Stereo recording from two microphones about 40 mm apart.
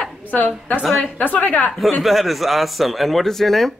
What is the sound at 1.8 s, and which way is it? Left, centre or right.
A woman's voice, centre.